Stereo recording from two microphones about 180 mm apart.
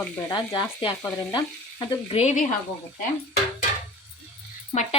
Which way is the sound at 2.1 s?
40° left (ahead or behind).